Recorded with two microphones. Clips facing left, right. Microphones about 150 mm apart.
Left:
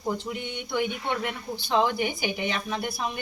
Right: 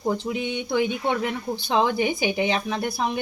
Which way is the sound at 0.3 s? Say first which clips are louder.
Right 7 dB; 90° right.